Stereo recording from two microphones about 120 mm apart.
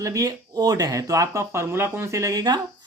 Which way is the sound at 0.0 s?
25° right (ahead or behind).